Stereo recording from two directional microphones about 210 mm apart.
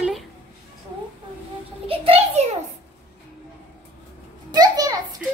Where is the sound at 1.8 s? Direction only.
25° right (ahead or behind).